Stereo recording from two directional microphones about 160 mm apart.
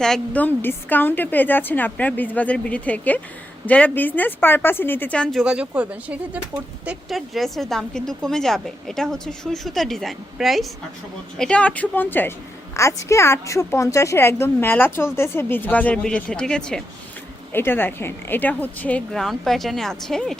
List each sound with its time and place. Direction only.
0.0 s a woman's voice: 5° left (ahead or behind)
5.4 s a woman's voice: 5° right (ahead or behind)